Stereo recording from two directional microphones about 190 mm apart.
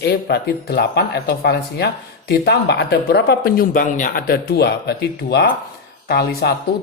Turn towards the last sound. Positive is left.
turn(degrees=60)  # may be behind; listen again after turning